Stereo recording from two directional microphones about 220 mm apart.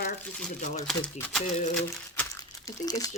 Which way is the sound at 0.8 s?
5° left (ahead or behind).